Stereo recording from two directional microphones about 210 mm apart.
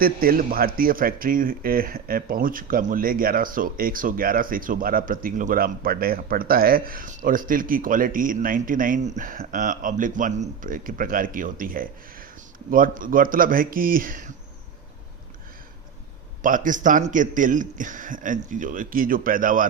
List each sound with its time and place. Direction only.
0.0 s a man's voice: 45° right (ahead or behind)
16.4 s a man's voice: 40° right (ahead or behind)